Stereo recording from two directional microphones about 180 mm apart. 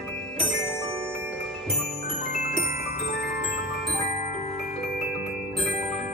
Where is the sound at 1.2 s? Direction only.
Centre (ahead or behind).